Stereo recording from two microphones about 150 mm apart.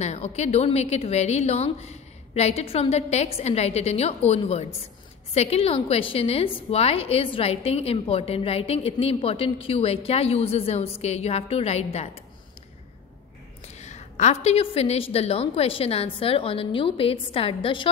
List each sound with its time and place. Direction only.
0.0 s a woman's voice: 45° left (ahead or behind)
13.7 s a woman's voice: 50° left (ahead or behind)